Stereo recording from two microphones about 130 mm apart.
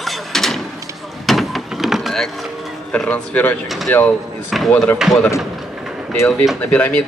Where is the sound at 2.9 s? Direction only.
10° left (ahead or behind).